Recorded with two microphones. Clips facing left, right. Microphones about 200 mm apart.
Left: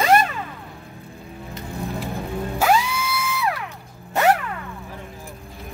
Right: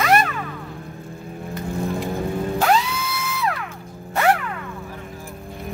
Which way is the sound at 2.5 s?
10° left (ahead or behind).